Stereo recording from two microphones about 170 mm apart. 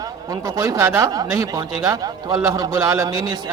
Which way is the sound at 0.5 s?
20° right (ahead or behind).